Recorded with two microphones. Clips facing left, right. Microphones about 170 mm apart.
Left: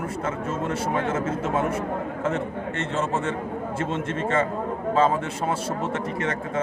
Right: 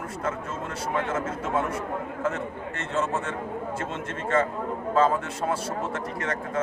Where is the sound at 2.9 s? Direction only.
25° left (ahead or behind).